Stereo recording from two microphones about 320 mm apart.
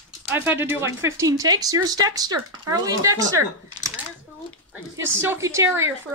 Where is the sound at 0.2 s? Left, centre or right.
Centre.